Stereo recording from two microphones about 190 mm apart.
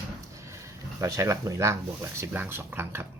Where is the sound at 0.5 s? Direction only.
15° right (ahead or behind).